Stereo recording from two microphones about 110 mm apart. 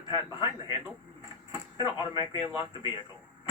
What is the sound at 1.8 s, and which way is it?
Speech, 50° left (ahead or behind).